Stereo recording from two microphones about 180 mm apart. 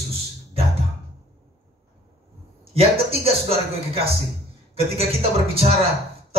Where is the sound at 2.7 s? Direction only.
35° right (ahead or behind).